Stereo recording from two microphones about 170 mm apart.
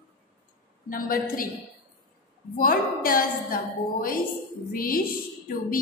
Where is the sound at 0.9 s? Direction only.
55° left (ahead or behind).